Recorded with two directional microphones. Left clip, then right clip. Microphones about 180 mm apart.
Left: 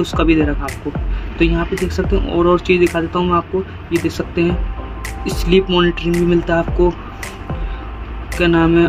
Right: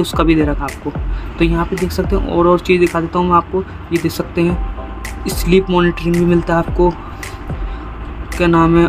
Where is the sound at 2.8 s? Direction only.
Centre (ahead or behind).